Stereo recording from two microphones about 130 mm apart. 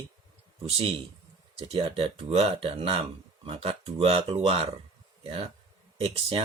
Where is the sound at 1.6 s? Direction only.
45° right (ahead or behind).